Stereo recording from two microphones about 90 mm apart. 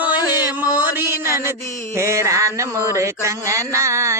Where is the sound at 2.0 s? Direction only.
35° right (ahead or behind).